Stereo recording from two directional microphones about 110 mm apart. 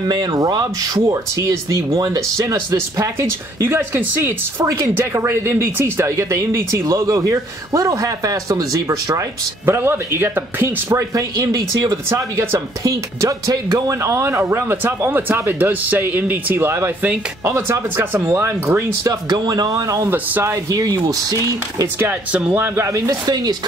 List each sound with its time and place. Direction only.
0.1 s speech: 35° right (ahead or behind); by 10.7 s 20° right (ahead or behind)
10.9 s speech: 30° right (ahead or behind)
20.1 s speech: 20° right (ahead or behind)
20.7 s speech: 35° right (ahead or behind)
21.9 s a man's voice: 20° right (ahead or behind)
23.2 s speech: 40° right (ahead or behind)